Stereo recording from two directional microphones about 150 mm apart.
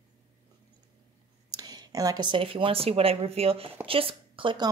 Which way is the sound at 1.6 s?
25° right (ahead or behind).